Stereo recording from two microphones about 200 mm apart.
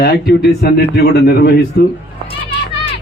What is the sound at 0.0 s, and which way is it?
Speech, 55° left (ahead or behind).